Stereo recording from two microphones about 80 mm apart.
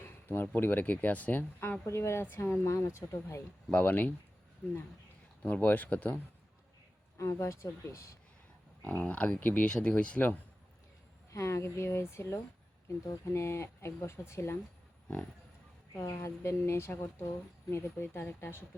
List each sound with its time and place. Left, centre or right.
0.0 s a sound: left
0.5 s speech: left
1.8 s speech: left
3.7 s speech: centre
5.4 s speech: left
7.2 s speech: left
8.8 s speech: left
11.3 s speech: left
16.0 s speech: left